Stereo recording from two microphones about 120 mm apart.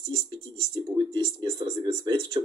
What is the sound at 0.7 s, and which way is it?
Speech, 35° right (ahead or behind).